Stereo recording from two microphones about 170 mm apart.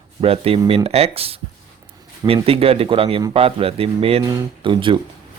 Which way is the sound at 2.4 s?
35° right (ahead or behind).